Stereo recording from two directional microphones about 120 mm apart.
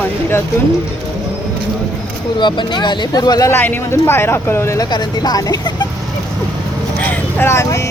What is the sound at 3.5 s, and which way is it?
Speech, 15° left (ahead or behind).